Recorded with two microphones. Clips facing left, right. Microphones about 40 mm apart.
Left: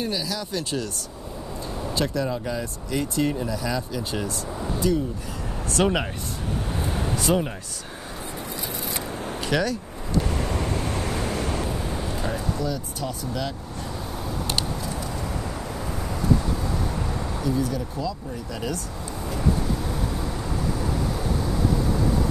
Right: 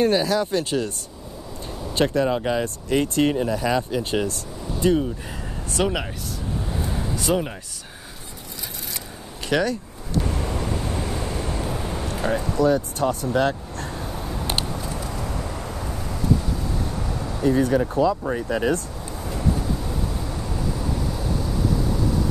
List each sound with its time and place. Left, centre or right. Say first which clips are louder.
0.0 s speech: right 9 dB; right
2.0 s speech: right 6 dB; right
5.8 s speech: left 1 dB; centre
6.8 s a sound: even; left
7.3 s speech: even; centre
9.5 s speech: right 3 dB; centre
10.4 s vehicle: even; centre
10.9 s vehicle: even; left
11.2 s waves: left 1 dB; left
11.6 s vehicle: right 1 dB; centre
12.5 s speech: right 9 dB; right
17.4 s speech: right 8 dB; right
17.9 s speech: right 9 dB; right
21.5 s vehicle: even; centre